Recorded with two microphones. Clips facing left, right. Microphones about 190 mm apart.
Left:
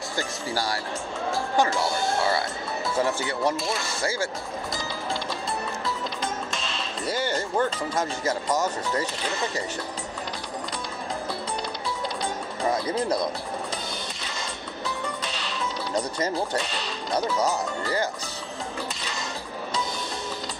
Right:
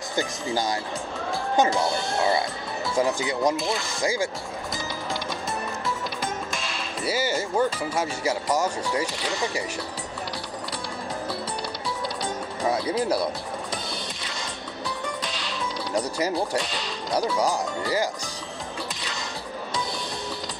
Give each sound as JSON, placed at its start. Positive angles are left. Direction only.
{"t": 0.1, "sound": "speech", "side_deg": -20}
{"t": 6.5, "sound": "speech", "side_deg": -10}
{"t": 12.6, "sound": "speech", "side_deg": -10}
{"t": 15.2, "sound": "speech", "side_deg": -10}